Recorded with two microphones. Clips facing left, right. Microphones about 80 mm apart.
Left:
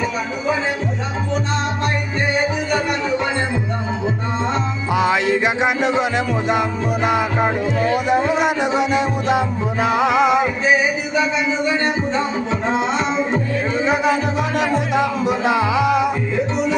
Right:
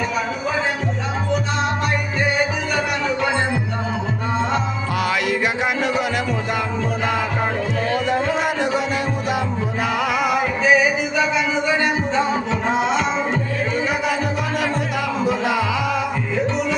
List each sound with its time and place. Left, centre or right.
4.9 s music: left
13.8 s music: left